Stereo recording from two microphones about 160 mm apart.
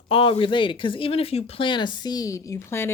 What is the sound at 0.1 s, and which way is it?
A woman's voice, 35° left (ahead or behind).